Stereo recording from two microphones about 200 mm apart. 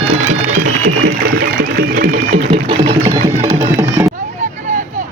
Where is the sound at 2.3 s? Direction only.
30° right (ahead or behind).